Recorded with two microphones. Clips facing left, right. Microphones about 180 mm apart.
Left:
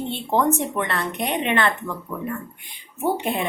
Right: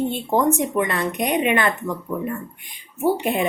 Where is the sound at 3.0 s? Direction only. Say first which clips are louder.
Right 3 dB; 10° right (ahead or behind).